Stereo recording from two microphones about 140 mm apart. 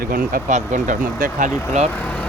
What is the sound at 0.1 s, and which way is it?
Speech, 90° right.